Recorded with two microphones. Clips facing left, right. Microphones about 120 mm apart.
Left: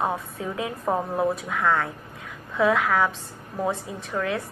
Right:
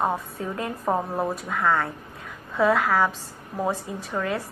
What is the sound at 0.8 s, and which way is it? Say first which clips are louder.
Speech: right 1 dB; 10° right (ahead or behind).